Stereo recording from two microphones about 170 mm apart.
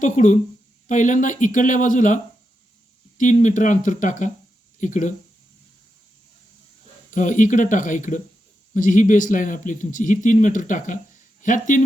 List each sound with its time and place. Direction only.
0.0 s speech: 45° left (ahead or behind)
7.1 s speech: 50° left (ahead or behind)